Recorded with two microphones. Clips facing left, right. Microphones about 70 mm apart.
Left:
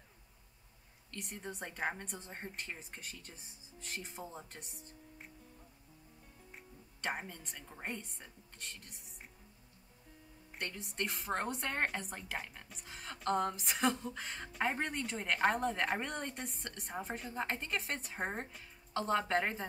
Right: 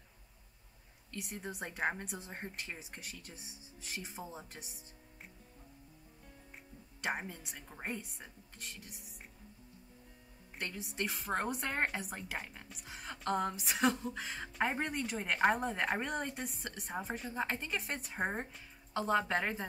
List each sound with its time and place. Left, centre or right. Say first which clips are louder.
1.1 s a woman's voice: right 2 dB; centre
7.0 s a woman's voice: right 2 dB; centre
10.5 s a woman's voice: right 1 dB; centre